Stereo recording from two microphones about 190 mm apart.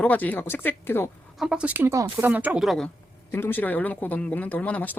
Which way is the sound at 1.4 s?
5° right (ahead or behind).